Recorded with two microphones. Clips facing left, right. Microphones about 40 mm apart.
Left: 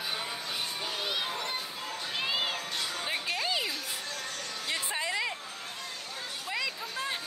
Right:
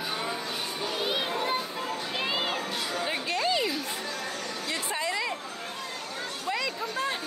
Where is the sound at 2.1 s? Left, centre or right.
Centre.